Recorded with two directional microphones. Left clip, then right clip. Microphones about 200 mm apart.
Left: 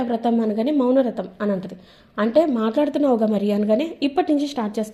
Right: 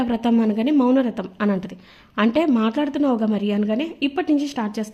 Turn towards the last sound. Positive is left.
turn(degrees=-15)  # may be behind; listen again after turning